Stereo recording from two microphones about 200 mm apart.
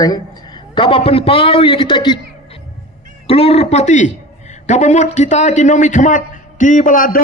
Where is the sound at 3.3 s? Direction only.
30° left (ahead or behind).